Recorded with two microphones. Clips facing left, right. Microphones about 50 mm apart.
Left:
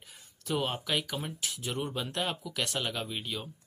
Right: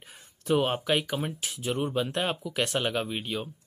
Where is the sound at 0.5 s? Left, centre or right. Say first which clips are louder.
Right 6 dB; right.